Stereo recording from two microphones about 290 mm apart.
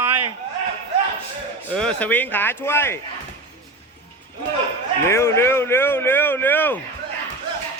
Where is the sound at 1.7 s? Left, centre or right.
Centre.